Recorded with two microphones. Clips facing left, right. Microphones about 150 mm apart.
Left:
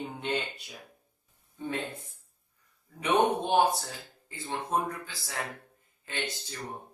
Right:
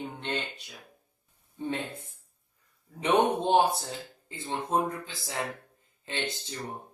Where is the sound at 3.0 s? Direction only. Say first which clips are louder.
Right 1 dB; 25° right (ahead or behind).